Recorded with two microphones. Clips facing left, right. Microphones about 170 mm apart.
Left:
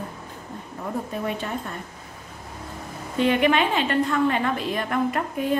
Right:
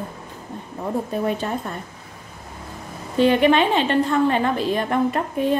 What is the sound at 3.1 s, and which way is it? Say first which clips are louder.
A woman's voice: right 4 dB; 30° right (ahead or behind).